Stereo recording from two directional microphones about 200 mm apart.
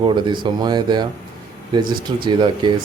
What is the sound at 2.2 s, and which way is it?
Speech, 20° right (ahead or behind).